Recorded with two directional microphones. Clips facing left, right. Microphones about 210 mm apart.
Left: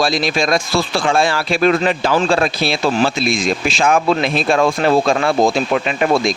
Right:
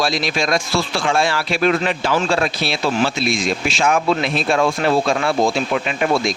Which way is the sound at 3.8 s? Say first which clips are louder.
Left 3 dB; 50° left (ahead or behind).